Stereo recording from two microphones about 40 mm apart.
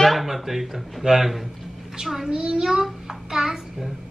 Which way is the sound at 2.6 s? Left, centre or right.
Centre.